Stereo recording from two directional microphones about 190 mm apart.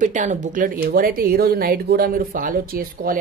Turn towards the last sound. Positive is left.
turn(degrees=-50)  # may be behind; listen again after turning